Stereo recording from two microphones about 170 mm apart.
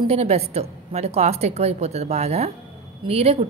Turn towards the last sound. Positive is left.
turn(degrees=-35)  # may be behind; listen again after turning